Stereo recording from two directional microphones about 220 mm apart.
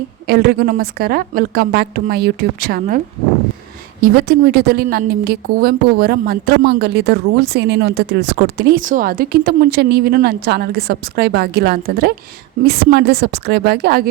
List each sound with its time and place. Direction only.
0.3 s a woman's voice: 45° right (ahead or behind)
4.0 s a woman's voice: 45° right (ahead or behind)